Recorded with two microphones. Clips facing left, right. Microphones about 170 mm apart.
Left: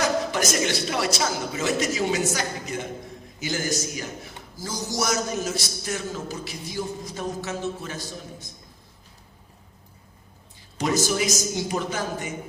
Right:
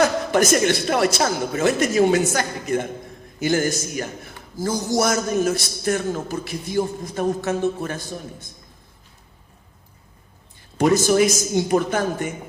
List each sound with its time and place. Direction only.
0.0 s a woman's voice: 55° right (ahead or behind)
10.8 s a man's voice: 55° right (ahead or behind)